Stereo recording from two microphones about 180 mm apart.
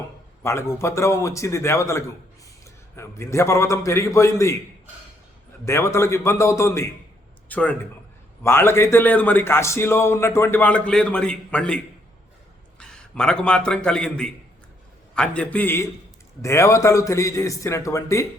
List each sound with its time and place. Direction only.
0.4 s a man's voice: 15° left (ahead or behind)
5.6 s a man's voice: 15° left (ahead or behind)
12.8 s a man's voice: 5° left (ahead or behind)